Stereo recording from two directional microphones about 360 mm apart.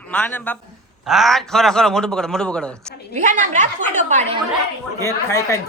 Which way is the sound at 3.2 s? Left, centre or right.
Right.